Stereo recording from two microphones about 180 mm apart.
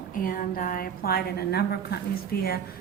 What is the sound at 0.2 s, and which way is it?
A woman's voice, 50° left (ahead or behind).